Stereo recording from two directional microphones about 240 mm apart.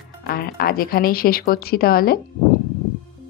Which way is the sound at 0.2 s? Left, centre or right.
Left.